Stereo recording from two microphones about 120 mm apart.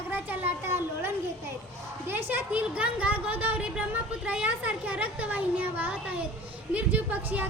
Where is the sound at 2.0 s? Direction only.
15° right (ahead or behind).